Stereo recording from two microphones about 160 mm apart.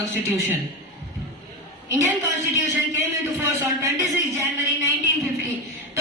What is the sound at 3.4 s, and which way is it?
Speech, 20° right (ahead or behind).